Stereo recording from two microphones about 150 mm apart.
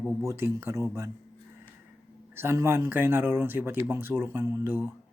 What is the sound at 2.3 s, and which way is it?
Speech, 15° right (ahead or behind).